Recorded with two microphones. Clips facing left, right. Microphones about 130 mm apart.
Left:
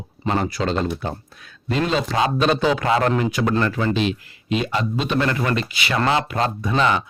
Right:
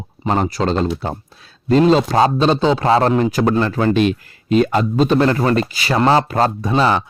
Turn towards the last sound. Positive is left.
turn(degrees=-35)  # may be behind; listen again after turning